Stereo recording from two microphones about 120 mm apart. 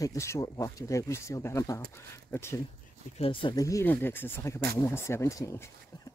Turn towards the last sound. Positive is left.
turn(degrees=25)  # may be behind; listen again after turning